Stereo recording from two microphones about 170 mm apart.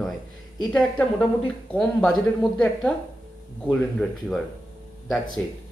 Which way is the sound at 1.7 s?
5° left (ahead or behind).